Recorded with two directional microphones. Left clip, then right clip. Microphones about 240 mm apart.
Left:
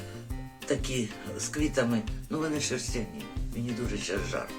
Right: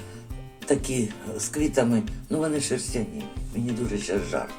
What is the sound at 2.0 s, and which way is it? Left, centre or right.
Speech, centre.